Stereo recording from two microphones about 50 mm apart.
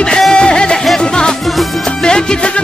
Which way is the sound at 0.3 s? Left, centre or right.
Centre.